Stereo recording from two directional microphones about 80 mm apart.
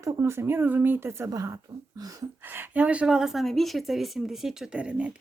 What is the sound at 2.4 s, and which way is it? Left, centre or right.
Speech, right.